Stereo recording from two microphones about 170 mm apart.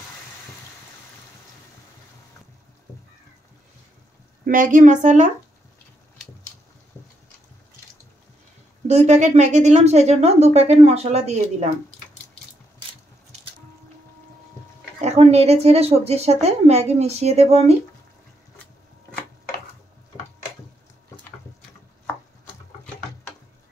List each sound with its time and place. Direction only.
4.5 s speech: 50° right (ahead or behind)
8.8 s a woman's voice: 40° right (ahead or behind)
15.0 s a woman's voice: 40° right (ahead or behind)